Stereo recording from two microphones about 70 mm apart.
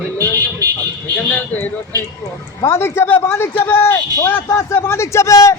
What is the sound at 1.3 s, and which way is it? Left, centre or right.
Speech, left.